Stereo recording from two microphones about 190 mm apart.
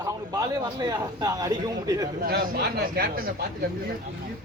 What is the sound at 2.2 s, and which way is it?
A man's voice, 55° right (ahead or behind).